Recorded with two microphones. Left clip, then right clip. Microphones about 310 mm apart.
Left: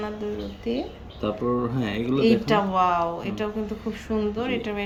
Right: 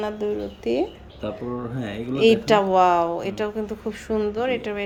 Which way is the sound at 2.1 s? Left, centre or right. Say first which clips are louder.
Right 5 dB; right.